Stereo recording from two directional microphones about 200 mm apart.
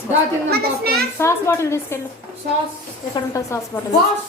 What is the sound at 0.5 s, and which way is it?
Speech, 50° right (ahead or behind).